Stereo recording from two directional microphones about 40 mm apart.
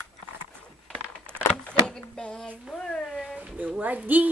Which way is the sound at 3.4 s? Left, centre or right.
Right.